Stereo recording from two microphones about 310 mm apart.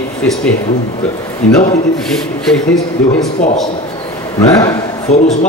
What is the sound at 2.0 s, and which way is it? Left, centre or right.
A man's voice, centre.